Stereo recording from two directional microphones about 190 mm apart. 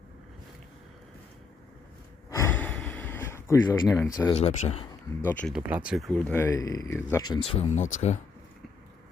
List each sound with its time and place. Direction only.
2.3 s gasp: 10° left (ahead or behind)
4.1 s speech: 20° left (ahead or behind)
4.4 s speech: 35° left (ahead or behind)
5.2 s speech: 10° left (ahead or behind)
5.5 s speech: 5° right (ahead or behind); by 7.4 s 20° left (ahead or behind)
7.6 s speech: 40° left (ahead or behind)